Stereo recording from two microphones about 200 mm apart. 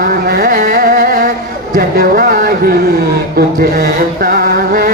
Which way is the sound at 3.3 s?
45° right (ahead or behind).